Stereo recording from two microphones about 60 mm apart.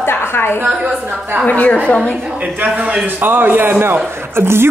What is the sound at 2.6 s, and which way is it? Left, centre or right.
A man's voice, right.